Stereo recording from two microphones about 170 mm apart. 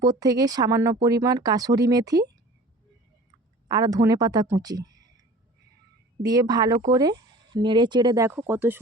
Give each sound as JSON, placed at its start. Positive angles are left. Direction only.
{"t": 0.0, "sound": "speech", "side_deg": -20}
{"t": 3.7, "sound": "speech", "side_deg": -20}
{"t": 6.2, "sound": "speech", "side_deg": -20}